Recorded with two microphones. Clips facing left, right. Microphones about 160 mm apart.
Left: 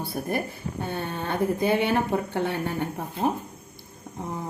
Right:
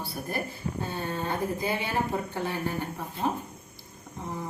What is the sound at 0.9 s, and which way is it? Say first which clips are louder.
Speech: left 3 dB; 65° left (ahead or behind).